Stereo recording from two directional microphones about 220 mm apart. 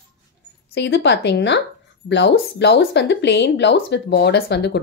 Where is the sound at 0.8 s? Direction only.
50° left (ahead or behind).